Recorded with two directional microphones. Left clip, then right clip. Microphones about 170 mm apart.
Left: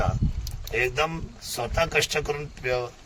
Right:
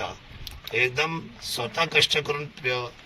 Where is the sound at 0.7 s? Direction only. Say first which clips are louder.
Right 1 dB; 20° left (ahead or behind).